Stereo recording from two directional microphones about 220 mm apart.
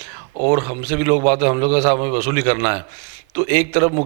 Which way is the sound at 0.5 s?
30° right (ahead or behind).